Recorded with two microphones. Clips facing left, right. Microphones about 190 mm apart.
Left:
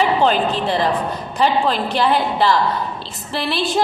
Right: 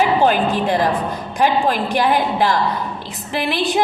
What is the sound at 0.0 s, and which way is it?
Speech, 10° right (ahead or behind).